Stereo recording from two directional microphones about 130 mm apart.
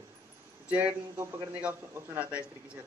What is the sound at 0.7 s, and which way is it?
A man's voice, 15° right (ahead or behind).